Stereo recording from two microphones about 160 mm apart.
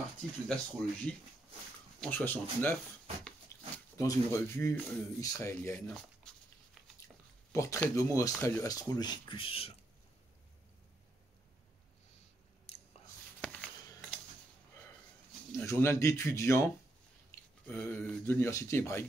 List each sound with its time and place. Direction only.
0.5 s speech: 5° left (ahead or behind)
3.9 s speech: 20° left (ahead or behind); by 6.3 s 5° left (ahead or behind)
7.5 s speech: 20° left (ahead or behind); by 9.8 s 35° left (ahead or behind)
12.7 s biting: 40° left (ahead or behind)
13.4 s a sound: 5° left (ahead or behind)
15.5 s speech: 15° left (ahead or behind)